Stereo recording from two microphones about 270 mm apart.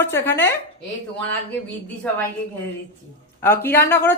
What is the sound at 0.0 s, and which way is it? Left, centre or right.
Speech, centre.